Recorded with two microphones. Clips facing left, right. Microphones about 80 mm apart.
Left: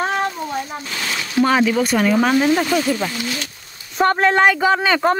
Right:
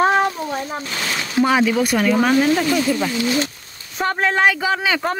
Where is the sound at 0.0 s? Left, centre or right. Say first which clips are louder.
Right 4 dB; centre.